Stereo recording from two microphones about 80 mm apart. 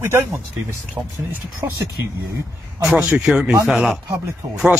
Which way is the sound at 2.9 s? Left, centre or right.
Centre.